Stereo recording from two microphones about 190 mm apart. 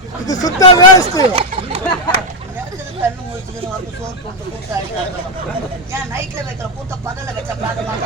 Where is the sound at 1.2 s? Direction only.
30° right (ahead or behind).